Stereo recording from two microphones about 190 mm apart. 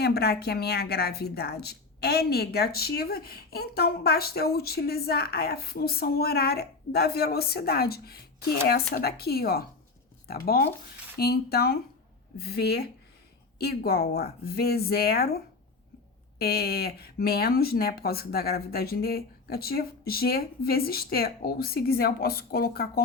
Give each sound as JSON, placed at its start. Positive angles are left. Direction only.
{"t": 0.0, "sound": "a woman's voice", "side_deg": 60}
{"t": 16.4, "sound": "speech", "side_deg": 55}